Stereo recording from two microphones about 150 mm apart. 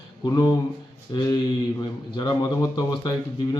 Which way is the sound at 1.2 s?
25° left (ahead or behind).